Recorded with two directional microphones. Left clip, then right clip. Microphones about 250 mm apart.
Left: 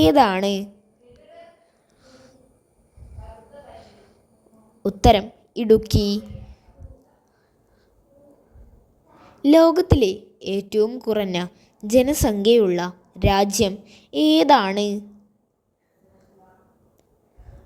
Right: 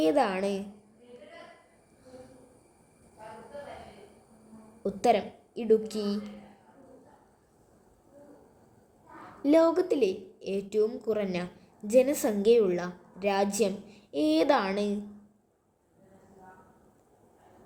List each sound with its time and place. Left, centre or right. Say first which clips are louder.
0.0 s a woman's voice: left 10 dB; left
4.8 s a woman's voice: left 9 dB; left
9.4 s a woman's voice: left 9 dB; left